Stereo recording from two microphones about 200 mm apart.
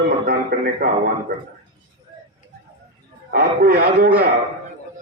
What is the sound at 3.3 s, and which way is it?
Speech, 50° right (ahead or behind).